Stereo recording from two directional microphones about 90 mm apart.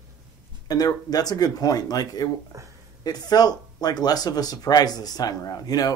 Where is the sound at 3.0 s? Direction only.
45° left (ahead or behind).